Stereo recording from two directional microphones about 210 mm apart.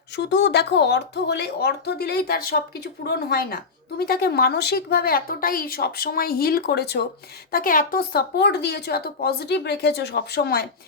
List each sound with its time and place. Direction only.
0.3 s speech: 55° left (ahead or behind)